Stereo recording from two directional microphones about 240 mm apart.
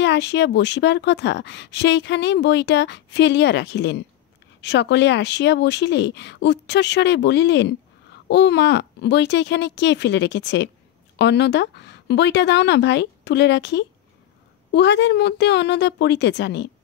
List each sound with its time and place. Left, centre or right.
0.0 s speech: left